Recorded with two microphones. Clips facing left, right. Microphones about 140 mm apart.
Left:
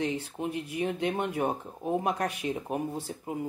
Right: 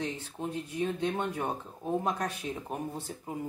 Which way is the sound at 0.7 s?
70° left (ahead or behind).